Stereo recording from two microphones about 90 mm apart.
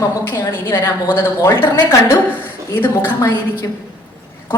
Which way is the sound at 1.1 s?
25° left (ahead or behind).